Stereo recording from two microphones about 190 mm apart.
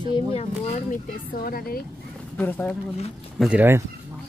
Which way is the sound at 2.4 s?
10° left (ahead or behind).